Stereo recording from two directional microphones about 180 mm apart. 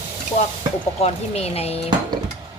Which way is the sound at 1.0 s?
35° left (ahead or behind).